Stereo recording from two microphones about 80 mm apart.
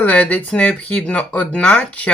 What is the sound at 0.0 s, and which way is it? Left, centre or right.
Speech, centre.